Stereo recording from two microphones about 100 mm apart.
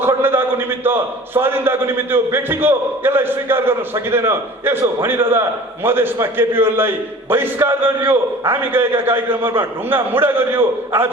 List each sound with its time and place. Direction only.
0.0 s a man's voice: 20° right (ahead or behind)